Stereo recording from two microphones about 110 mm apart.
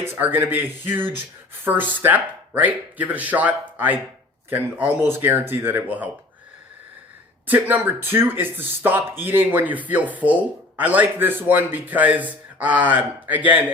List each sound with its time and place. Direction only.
0.0 s speech: 20° right (ahead or behind)
7.4 s speech: 15° right (ahead or behind)